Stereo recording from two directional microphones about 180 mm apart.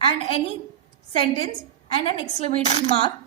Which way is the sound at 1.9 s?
30° left (ahead or behind).